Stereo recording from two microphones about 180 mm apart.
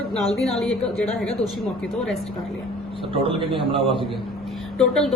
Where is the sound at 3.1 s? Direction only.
30° right (ahead or behind).